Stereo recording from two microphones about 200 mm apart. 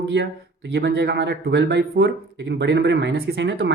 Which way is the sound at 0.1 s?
60° right (ahead or behind).